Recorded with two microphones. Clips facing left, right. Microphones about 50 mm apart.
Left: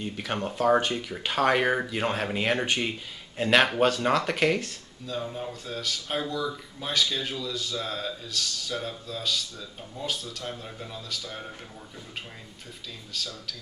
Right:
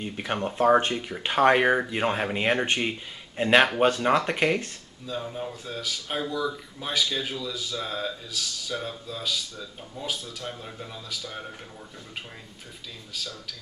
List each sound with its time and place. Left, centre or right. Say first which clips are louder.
0.0 s speech: right 2 dB; centre
0.6 s speech: right 2 dB; right; by 11.4 s centre
13.1 s speech: left 1 dB; centre